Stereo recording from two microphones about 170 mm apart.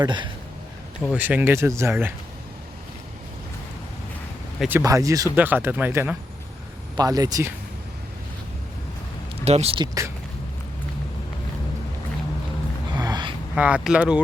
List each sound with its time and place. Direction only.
0.0 s speech: 25° right (ahead or behind)
1.0 s speech: 10° right (ahead or behind)
4.8 s speech: 20° right (ahead or behind)
6.9 s speech: 20° right (ahead or behind)
9.4 s speech: 40° right (ahead or behind)
9.8 s speech: 20° right (ahead or behind)
13.0 s gasp: 25° right (ahead or behind)
13.6 s speech: 10° right (ahead or behind)